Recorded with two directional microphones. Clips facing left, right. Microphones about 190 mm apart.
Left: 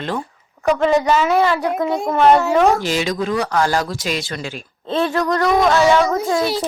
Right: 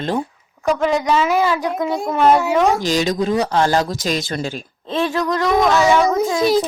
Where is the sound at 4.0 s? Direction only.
45° right (ahead or behind).